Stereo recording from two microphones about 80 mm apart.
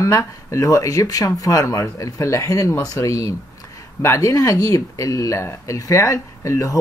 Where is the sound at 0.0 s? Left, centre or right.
Left.